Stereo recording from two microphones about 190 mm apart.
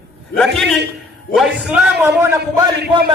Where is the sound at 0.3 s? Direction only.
5° left (ahead or behind).